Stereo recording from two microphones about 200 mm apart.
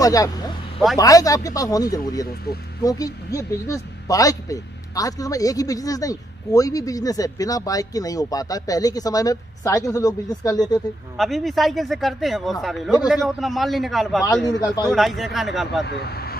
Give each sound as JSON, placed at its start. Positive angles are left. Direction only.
{"t": 0.0, "sound": "speech", "side_deg": 15}
{"t": 11.1, "sound": "speech", "side_deg": 0}
{"t": 14.2, "sound": "speech", "side_deg": 20}
{"t": 14.9, "sound": "speech", "side_deg": 0}
{"t": 15.8, "sound": "speech", "side_deg": 55}